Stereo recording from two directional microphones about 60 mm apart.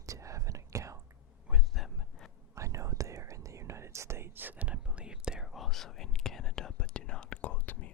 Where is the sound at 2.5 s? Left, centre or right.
Right; by 5.5 s centre.